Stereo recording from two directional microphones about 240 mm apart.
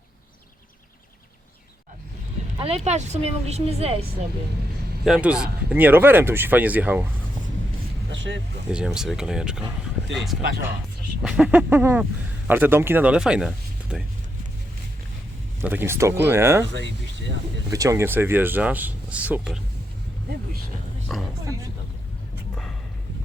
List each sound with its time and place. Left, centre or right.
2.6 s a woman's voice: right
5.0 s speech: centre
8.1 s vehicle: right
8.7 s speech: centre
11.2 s speech: centre
15.6 s speech: centre
17.7 s speech: centre
21.1 s speech: centre
21.4 s speech: centre